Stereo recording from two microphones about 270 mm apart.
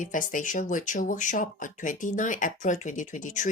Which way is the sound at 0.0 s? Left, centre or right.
Left.